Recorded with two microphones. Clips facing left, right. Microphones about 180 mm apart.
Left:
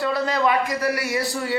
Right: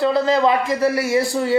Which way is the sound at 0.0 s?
25° right (ahead or behind).